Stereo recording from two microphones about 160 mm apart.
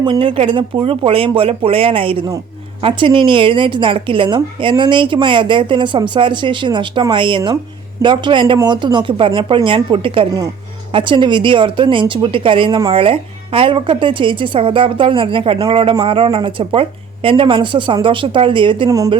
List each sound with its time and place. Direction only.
0.0 s a man's voice: 30° right (ahead or behind)